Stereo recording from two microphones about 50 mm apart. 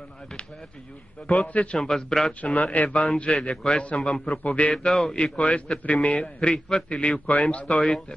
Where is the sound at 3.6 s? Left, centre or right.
Centre.